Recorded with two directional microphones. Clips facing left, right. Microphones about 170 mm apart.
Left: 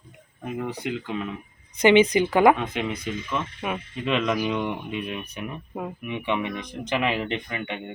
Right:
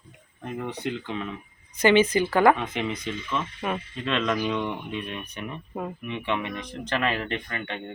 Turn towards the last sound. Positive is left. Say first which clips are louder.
# left 2 dB
turn(degrees=15)  # may be behind; listen again after turning